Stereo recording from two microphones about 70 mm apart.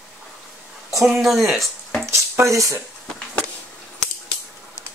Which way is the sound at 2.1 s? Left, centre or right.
Right.